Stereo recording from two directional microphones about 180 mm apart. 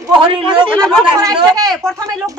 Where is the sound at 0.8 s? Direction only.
Centre (ahead or behind).